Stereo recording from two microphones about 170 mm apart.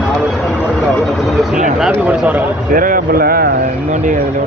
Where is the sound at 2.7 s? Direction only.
55° right (ahead or behind).